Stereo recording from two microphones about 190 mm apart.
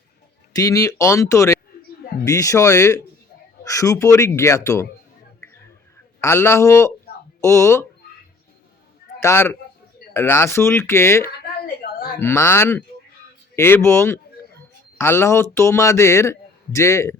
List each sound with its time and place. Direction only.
0.5 s a man's voice: 20° left (ahead or behind)
6.1 s a man's voice: 15° left (ahead or behind)
9.2 s a man's voice: 10° left (ahead or behind)
11.6 s a sound: 50° left (ahead or behind)
12.2 s a man's voice: 15° left (ahead or behind)